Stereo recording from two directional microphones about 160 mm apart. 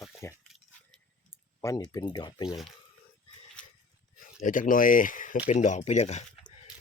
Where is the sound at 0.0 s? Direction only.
15° left (ahead or behind).